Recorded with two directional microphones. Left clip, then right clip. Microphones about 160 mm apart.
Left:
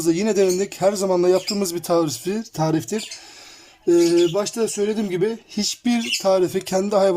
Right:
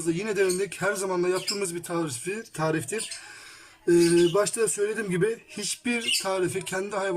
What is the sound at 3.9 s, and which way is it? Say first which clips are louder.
Speech: left 4 dB; 20° left (ahead or behind).